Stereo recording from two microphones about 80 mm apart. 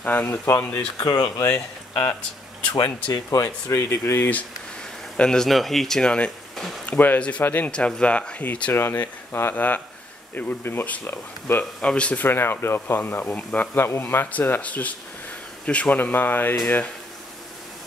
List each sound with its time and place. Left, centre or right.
0.0 s speech: left
0.9 s speech: left
2.7 s speech: left
3.7 s speech: left
5.1 s speech: centre
6.9 s speech: left
11.8 s speech: centre
13.7 s speech: left